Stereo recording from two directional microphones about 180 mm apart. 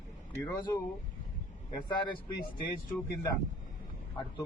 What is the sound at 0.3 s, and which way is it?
Speech, 15° left (ahead or behind).